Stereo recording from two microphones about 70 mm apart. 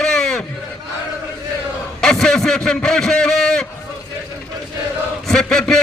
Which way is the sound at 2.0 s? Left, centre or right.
Centre.